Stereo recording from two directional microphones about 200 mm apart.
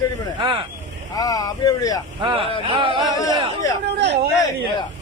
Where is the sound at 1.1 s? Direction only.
20° left (ahead or behind).